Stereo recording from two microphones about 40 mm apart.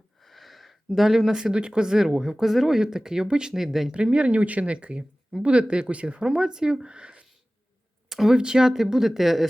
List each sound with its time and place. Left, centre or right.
0.2 s speech: centre; by 3.5 s right
3.5 s speech: centre
3.9 s speech: right
6.4 s speech: centre
8.1 s speech: centre